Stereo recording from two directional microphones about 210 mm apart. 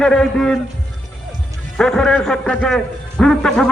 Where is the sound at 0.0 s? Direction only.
Centre (ahead or behind).